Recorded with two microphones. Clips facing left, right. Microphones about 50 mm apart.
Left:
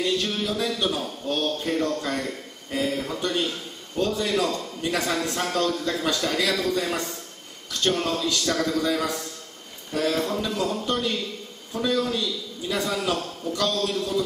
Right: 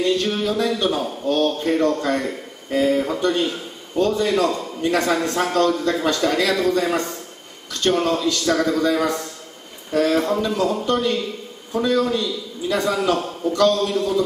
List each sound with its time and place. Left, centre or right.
0.0 s a man's voice: centre
4.0 s a man's voice: centre
4.3 s speech: centre
10.4 s a man's voice: centre